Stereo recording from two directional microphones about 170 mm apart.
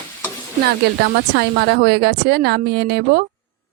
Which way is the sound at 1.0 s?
80° right.